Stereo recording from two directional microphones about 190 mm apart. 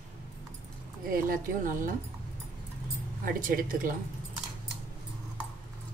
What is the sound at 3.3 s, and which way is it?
Speech, 45° right (ahead or behind).